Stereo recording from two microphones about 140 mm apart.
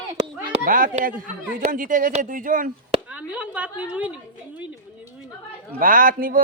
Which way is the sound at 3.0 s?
10° right (ahead or behind).